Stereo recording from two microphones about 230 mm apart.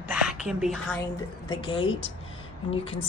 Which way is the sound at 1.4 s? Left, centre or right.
Centre.